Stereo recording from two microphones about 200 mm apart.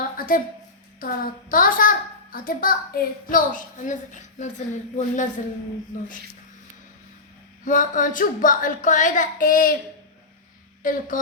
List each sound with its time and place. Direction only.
0.2 s a sound: 45° left (ahead or behind)
0.9 s a child's voice: 45° left (ahead or behind)
7.6 s speech: 40° left (ahead or behind)
10.8 s a child's voice: 40° left (ahead or behind)